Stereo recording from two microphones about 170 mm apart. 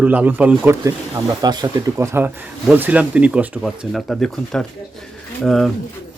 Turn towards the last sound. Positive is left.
turn(degrees=0)  # may be behind; listen again after turning